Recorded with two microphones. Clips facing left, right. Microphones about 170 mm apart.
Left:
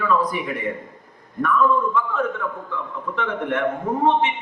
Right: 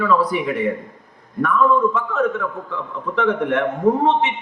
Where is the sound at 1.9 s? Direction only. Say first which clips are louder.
Right 3 dB; 70° right (ahead or behind).